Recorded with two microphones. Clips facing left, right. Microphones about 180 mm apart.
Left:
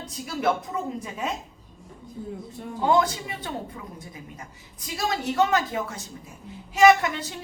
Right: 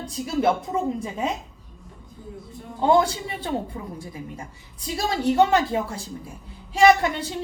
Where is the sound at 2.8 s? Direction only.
30° right (ahead or behind).